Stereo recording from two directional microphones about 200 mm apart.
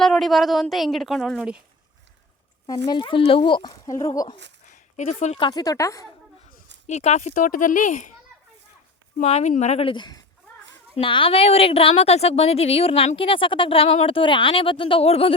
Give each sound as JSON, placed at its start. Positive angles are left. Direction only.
{"t": 0.0, "sound": "a woman's voice", "side_deg": 0}
{"t": 2.6, "sound": "a woman's voice", "side_deg": 20}
{"t": 4.6, "sound": "a sound", "side_deg": 35}
{"t": 5.5, "sound": "speech", "side_deg": 20}
{"t": 6.8, "sound": "speech", "side_deg": 35}
{"t": 9.1, "sound": "a woman's voice", "side_deg": 35}